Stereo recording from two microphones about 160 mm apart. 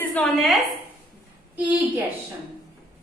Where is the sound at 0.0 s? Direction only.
10° left (ahead or behind).